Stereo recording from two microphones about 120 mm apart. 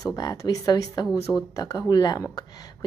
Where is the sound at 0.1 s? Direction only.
30° left (ahead or behind).